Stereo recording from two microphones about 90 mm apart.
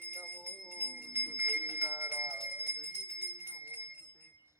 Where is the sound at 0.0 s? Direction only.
25° right (ahead or behind).